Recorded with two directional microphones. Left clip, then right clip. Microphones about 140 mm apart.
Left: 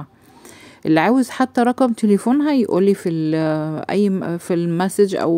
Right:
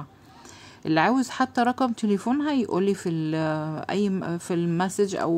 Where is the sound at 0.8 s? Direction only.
40° left (ahead or behind).